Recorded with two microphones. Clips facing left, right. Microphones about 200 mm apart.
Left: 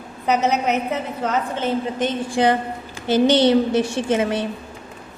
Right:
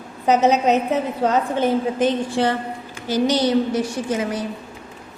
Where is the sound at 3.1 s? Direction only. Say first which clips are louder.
Left 3 dB; 25° left (ahead or behind).